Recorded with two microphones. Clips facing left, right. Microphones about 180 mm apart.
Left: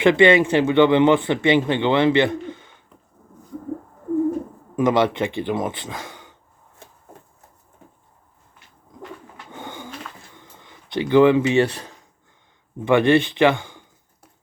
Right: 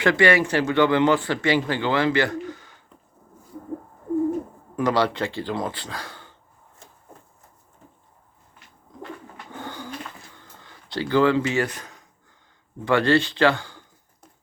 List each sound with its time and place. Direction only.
0.0 s speech: 20° left (ahead or behind)
4.8 s speech: 20° left (ahead or behind)
9.5 s pigeon: 20° left (ahead or behind)
10.3 s a sound: 20° left (ahead or behind)
12.8 s speech: 20° left (ahead or behind)